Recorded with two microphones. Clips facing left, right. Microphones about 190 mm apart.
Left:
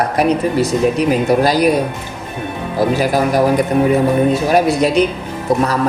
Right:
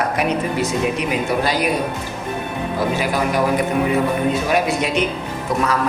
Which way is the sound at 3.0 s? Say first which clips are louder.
Left 5 dB; 40° left (ahead or behind).